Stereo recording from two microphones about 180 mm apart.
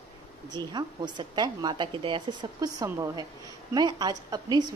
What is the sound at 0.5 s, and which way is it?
A woman's voice, 25° right (ahead or behind).